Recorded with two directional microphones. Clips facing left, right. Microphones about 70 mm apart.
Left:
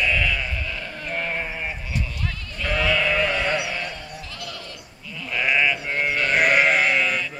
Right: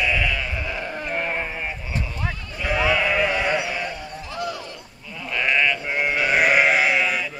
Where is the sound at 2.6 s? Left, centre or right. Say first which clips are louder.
Right 1 dB; centre.